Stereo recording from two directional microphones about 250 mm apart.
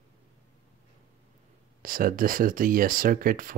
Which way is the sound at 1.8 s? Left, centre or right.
Right.